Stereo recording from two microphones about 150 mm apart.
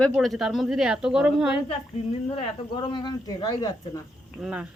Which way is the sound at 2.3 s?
30° left (ahead or behind).